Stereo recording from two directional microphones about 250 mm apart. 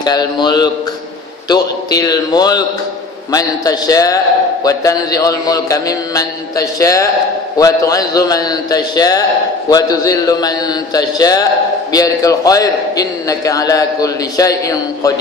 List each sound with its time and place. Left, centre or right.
0.0 s a man's voice: centre